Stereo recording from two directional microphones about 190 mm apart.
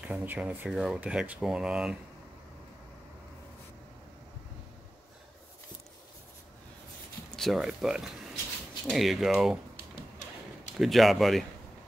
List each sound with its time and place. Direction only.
0.0 s speech: 10° right (ahead or behind)
7.3 s speech: centre (ahead or behind)
10.8 s speech: centre (ahead or behind)